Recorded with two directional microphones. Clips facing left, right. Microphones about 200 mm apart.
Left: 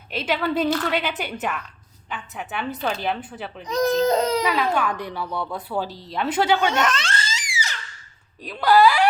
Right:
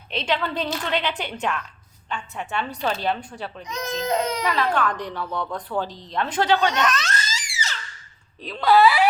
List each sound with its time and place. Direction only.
0.1 s a woman's voice: 5° left (ahead or behind)
3.7 s speech: 35° left (ahead or behind)
4.4 s a woman's voice: 5° left (ahead or behind)
6.7 s a child's voice: 25° left (ahead or behind)
8.4 s a woman's voice: centre (ahead or behind)